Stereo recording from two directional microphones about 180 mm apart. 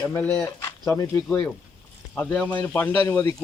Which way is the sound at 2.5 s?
10° left (ahead or behind).